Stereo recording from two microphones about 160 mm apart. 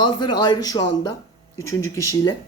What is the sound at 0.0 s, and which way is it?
Speech, 30° left (ahead or behind).